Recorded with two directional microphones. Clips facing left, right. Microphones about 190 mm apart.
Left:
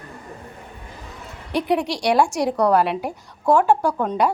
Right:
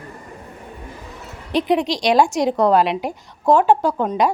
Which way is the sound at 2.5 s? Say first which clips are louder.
Right 1 dB; 20° right (ahead or behind).